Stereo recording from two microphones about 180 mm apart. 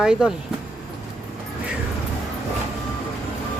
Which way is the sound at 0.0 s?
5° right (ahead or behind).